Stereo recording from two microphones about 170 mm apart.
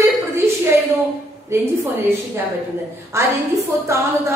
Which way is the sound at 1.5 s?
15° right (ahead or behind).